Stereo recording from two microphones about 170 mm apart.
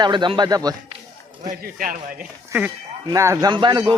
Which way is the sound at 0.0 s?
25° right (ahead or behind).